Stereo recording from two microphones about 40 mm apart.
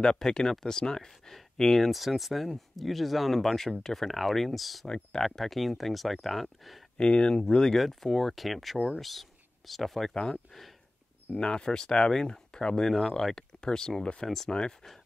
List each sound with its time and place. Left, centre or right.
0.0 s speech: centre
1.9 s speech: centre
7.0 s speech: left
7.8 s speech: centre
10.1 s speech: left
12.8 s speech: centre